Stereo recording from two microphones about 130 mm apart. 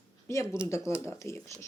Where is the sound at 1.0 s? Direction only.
20° left (ahead or behind).